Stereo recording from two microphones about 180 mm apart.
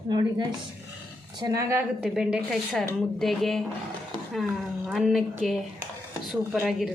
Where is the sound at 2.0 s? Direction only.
5° right (ahead or behind).